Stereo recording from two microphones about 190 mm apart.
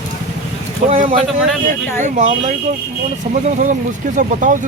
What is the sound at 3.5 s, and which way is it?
Speech, 40° right (ahead or behind).